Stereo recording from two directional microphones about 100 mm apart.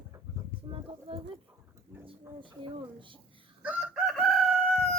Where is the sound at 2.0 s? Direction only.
55° right (ahead or behind).